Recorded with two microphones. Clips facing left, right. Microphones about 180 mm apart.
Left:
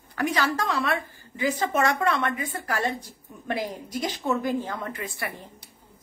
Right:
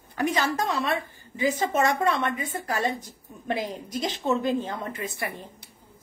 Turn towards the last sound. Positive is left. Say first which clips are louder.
# right 1 dB
turn(degrees=-20)  # may be behind; listen again after turning